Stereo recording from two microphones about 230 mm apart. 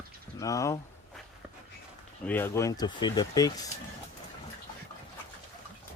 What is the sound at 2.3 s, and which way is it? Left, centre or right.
Speech, centre.